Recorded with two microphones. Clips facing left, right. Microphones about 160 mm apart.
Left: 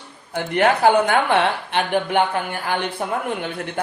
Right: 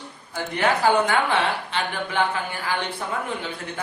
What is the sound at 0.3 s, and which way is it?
Speech, 55° left (ahead or behind).